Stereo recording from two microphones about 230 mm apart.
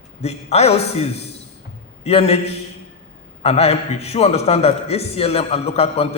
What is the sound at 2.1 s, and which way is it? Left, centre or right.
A man's voice, left.